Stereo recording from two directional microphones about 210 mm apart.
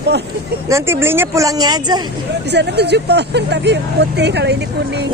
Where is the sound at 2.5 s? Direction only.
55° right (ahead or behind).